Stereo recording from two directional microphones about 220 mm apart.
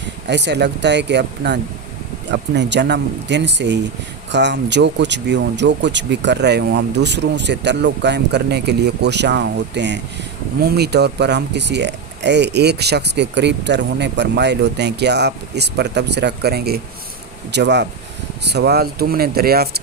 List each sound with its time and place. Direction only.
0.3 s speech: 50° right (ahead or behind)